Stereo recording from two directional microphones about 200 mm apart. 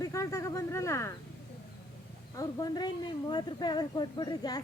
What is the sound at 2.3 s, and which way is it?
Speech, 20° left (ahead or behind).